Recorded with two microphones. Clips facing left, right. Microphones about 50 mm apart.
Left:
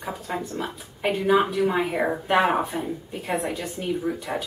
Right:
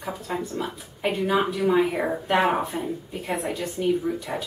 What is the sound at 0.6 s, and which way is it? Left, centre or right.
Speech, centre.